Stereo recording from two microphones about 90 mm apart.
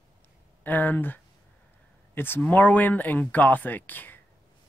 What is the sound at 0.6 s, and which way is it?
Speech, 20° left (ahead or behind).